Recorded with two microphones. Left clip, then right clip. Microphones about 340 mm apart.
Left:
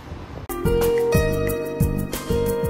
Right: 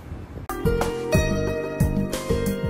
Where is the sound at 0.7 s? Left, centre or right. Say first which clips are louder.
Left 5 dB; centre.